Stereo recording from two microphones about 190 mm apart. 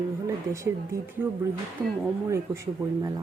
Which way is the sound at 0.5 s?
15° right (ahead or behind).